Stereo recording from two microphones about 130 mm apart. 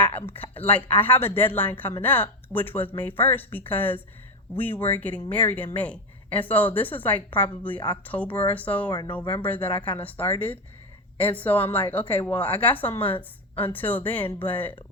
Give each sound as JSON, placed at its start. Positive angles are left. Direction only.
{"t": 0.0, "sound": "speech", "side_deg": 15}
{"t": 8.9, "sound": "speech", "side_deg": 35}
{"t": 9.4, "sound": "speech", "side_deg": 10}
{"t": 13.1, "sound": "a woman's voice", "side_deg": 45}
{"t": 13.7, "sound": "speech", "side_deg": 15}